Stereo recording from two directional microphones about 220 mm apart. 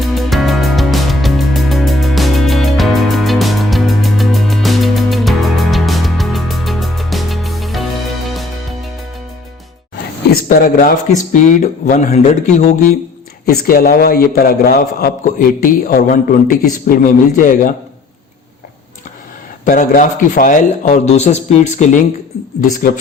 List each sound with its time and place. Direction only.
0.0 s music: centre (ahead or behind)
11.2 s a man's voice: 35° left (ahead or behind)
13.4 s a man's voice: 45° left (ahead or behind)
19.6 s a man's voice: 35° left (ahead or behind)